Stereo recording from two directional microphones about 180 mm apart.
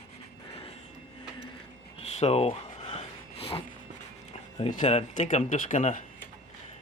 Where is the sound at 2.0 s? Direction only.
35° left (ahead or behind).